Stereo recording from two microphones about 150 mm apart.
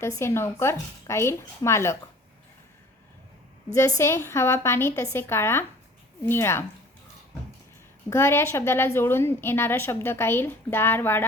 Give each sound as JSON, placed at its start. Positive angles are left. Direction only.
{"t": 0.0, "sound": "a woman's voice", "side_deg": 20}
{"t": 3.8, "sound": "a woman's voice", "side_deg": 20}
{"t": 8.1, "sound": "a woman's voice", "side_deg": 15}